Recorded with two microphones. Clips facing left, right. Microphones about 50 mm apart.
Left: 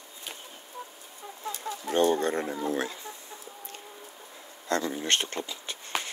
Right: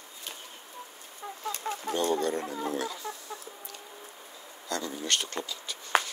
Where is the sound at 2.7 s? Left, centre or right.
Left.